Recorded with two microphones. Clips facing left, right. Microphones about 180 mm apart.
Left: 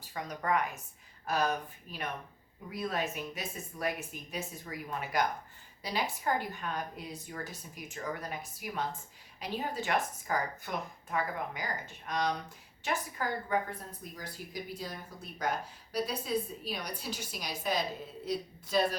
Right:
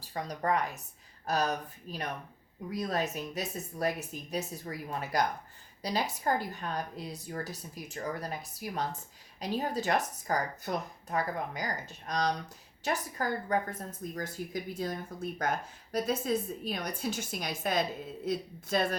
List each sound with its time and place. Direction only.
0.1 s a woman's voice: 35° right (ahead or behind); by 18.9 s 50° right (ahead or behind)